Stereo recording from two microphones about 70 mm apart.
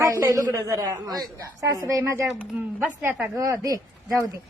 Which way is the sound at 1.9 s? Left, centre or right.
Right.